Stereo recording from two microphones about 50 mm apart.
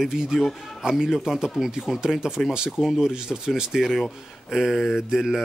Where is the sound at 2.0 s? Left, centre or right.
Centre.